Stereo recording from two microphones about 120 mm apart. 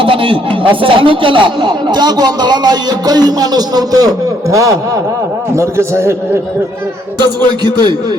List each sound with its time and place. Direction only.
0.0 s a man's voice: 45° right (ahead or behind); by 6.1 s 25° right (ahead or behind)
7.2 s speech: 35° right (ahead or behind)